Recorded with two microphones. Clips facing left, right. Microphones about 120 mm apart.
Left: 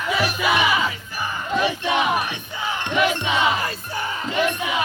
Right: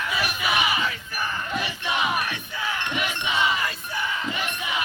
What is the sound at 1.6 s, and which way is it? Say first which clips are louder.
Battle cry: left 8 dB; 65° left (ahead or behind).